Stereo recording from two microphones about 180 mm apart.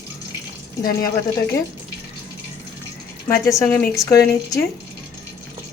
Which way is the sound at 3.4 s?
15° left (ahead or behind).